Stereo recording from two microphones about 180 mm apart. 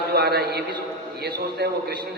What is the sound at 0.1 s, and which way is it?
A man's voice, 60° right (ahead or behind).